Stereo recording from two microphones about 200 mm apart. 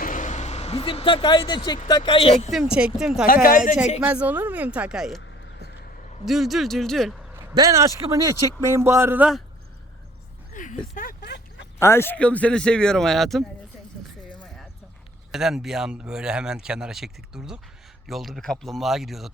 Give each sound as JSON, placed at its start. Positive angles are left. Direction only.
{"t": 0.0, "sound": "a sound", "side_deg": 40}
{"t": 1.9, "sound": "speech", "side_deg": 20}
{"t": 2.5, "sound": "speech", "side_deg": -5}
{"t": 3.2, "sound": "speech", "side_deg": 45}
{"t": 4.0, "sound": "speech", "side_deg": -5}
{"t": 6.2, "sound": "speech", "side_deg": 0}
{"t": 7.5, "sound": "speech", "side_deg": -15}
{"t": 10.5, "sound": "a sound", "side_deg": 40}
{"t": 11.8, "sound": "speech", "side_deg": 15}
{"t": 15.3, "sound": "speech", "side_deg": 0}